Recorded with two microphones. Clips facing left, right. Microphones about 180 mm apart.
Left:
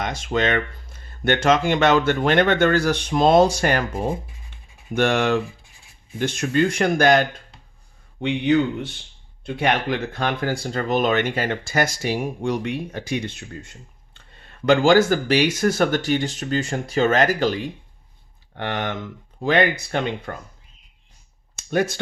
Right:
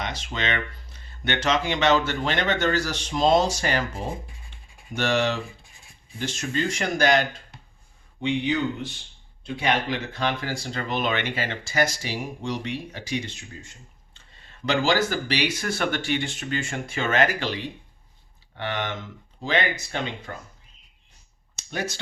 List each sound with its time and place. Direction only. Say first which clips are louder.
0.0 s speech: left 8 dB; 50° left (ahead or behind)
21.7 s speech: left 9 dB; 55° left (ahead or behind)